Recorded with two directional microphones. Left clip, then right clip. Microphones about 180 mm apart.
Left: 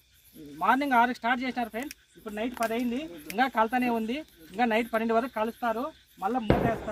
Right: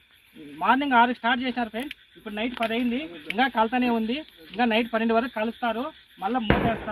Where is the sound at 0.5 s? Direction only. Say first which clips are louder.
Right 3 dB; 20° left (ahead or behind).